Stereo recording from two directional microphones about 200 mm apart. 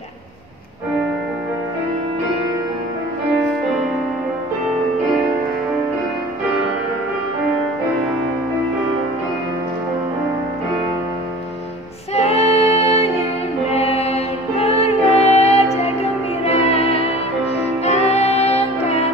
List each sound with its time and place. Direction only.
12.2 s music: 30° left (ahead or behind)